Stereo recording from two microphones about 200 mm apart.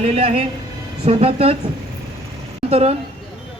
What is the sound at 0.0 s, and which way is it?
Speech, 30° right (ahead or behind).